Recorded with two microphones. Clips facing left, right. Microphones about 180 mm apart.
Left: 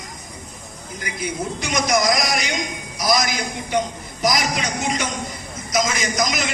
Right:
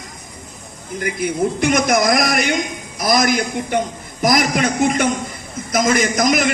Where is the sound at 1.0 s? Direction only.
55° right (ahead or behind).